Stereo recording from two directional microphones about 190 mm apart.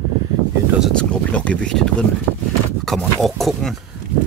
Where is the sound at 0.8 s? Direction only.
5° left (ahead or behind).